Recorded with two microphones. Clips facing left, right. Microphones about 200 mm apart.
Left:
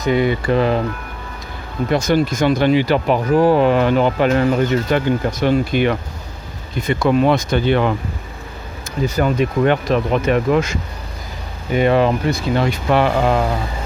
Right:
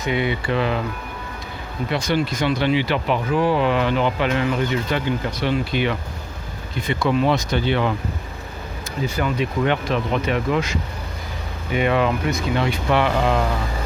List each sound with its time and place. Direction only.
0.0 s speech: 40° left (ahead or behind)
1.9 s speech: 45° left (ahead or behind)
9.0 s speech: 45° left (ahead or behind)
11.7 s speech: 35° left (ahead or behind)